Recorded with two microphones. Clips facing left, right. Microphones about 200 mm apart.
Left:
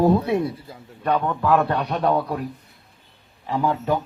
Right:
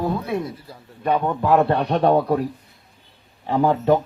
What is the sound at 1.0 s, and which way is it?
Speech, 15° right (ahead or behind).